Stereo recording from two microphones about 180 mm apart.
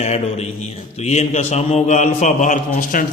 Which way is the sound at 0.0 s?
35° left (ahead or behind).